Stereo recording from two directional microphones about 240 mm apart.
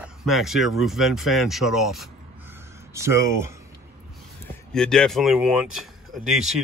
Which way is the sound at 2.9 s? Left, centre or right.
Centre.